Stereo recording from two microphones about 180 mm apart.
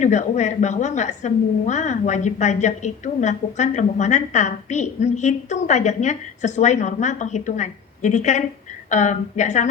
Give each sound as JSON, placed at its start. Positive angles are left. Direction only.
{"t": 0.0, "sound": "a woman's voice", "side_deg": 40}